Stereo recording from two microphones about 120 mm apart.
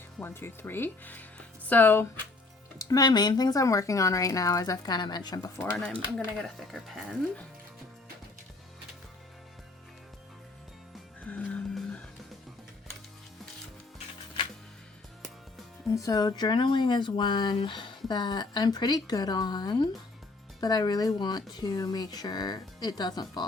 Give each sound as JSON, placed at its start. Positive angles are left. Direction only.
{"t": 0.2, "sound": "speech", "side_deg": 20}
{"t": 2.7, "sound": "speech", "side_deg": 30}
{"t": 5.7, "sound": "speech", "side_deg": 5}
{"t": 11.2, "sound": "music", "side_deg": 10}
{"t": 16.0, "sound": "speech", "side_deg": 30}